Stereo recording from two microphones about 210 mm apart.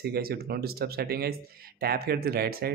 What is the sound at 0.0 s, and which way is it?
Speech, 50° right (ahead or behind).